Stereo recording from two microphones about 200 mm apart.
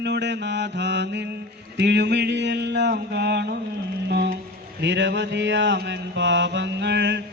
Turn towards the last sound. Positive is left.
turn(degrees=-60)  # may be behind; listen again after turning